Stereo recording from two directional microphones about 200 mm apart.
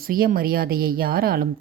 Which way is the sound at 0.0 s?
45° right (ahead or behind).